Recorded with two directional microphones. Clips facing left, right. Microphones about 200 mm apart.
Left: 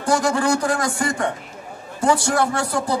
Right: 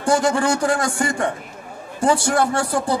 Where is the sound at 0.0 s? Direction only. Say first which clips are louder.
Right 1 dB; 25° right (ahead or behind).